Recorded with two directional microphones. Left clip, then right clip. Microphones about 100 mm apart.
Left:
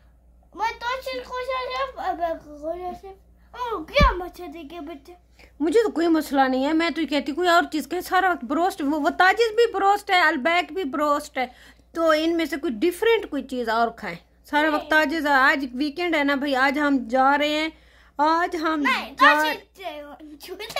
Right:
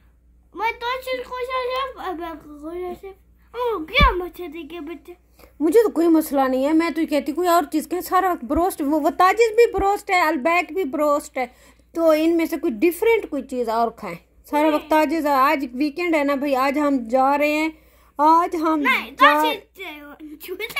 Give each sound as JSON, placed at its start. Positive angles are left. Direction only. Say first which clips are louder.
{"t": 0.6, "sound": "a sound", "louder": "right 2 dB", "side_deg": 25}
{"t": 3.5, "sound": "a child's voice", "louder": "right 3 dB", "side_deg": 20}
{"t": 5.6, "sound": "a woman's voice", "louder": "right 4 dB", "side_deg": -50}
{"t": 18.8, "sound": "a child's voice", "louder": "right 3 dB", "side_deg": 30}